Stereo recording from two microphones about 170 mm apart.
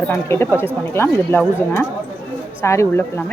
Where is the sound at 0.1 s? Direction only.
15° left (ahead or behind).